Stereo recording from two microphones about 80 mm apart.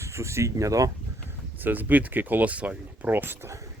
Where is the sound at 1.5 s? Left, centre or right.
Right.